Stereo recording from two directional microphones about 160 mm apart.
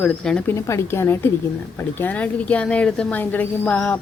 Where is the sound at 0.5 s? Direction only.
20° left (ahead or behind).